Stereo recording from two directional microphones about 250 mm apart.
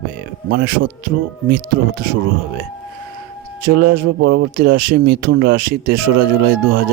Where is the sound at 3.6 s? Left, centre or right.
Right.